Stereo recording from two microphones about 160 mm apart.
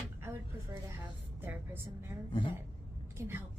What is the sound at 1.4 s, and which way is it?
Speech, 15° right (ahead or behind).